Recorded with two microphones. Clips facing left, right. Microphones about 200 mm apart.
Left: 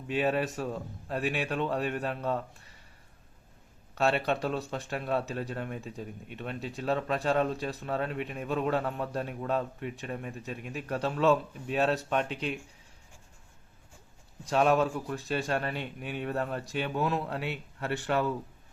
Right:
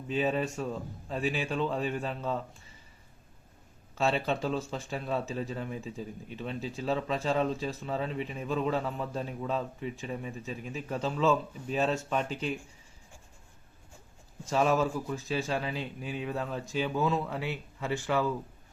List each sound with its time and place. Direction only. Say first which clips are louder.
0.1 s a man's voice: left 1 dB; centre (ahead or behind)
3.9 s a man's voice: left 1 dB; centre (ahead or behind)
14.5 s a man's voice: left 1 dB; centre (ahead or behind)
17.2 s speech: even; 65° left (ahead or behind)